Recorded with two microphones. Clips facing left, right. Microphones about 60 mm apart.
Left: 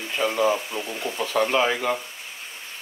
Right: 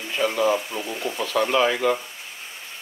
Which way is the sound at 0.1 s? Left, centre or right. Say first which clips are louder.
Right 1 dB; centre.